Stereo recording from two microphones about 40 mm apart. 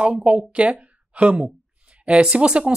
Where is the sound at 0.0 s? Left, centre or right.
Right.